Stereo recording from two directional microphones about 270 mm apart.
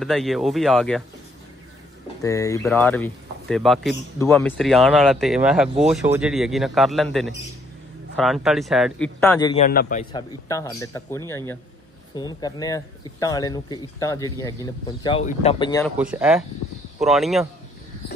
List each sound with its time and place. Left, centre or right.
0.0 s speech: centre
2.2 s speech: centre
9.2 s speech: centre
9.6 s a man's voice: left
10.1 s speech: centre
15.8 s speech: centre